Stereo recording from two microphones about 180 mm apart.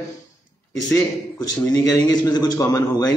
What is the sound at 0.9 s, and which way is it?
A man's voice, 20° left (ahead or behind).